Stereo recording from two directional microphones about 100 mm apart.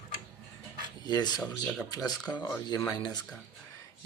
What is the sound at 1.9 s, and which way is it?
Speech, 40° left (ahead or behind).